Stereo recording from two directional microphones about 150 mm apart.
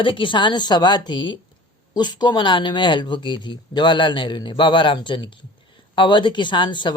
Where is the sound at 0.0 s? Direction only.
35° left (ahead or behind).